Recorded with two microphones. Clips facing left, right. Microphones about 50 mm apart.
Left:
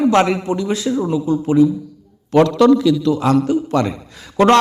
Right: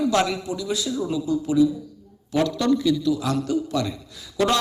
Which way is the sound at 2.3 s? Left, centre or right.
Left.